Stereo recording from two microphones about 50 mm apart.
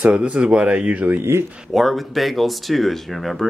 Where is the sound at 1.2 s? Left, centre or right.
Right.